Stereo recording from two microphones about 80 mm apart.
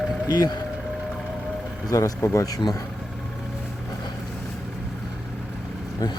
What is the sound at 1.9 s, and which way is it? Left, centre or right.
Speech, left.